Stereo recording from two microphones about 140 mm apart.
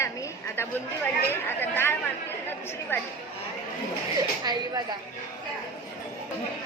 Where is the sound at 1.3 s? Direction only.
15° left (ahead or behind).